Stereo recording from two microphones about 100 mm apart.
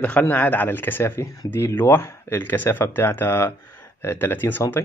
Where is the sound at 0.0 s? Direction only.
15° left (ahead or behind).